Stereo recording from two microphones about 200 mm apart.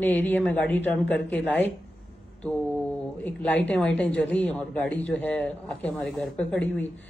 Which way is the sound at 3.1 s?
10° left (ahead or behind).